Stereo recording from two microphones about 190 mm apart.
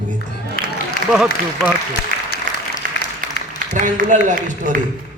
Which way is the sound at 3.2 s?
45° right (ahead or behind).